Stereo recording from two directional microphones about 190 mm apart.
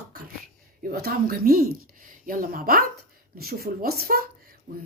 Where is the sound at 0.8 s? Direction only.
50° right (ahead or behind).